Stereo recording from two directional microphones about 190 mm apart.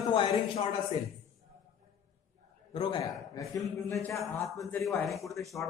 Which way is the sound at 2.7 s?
25° left (ahead or behind).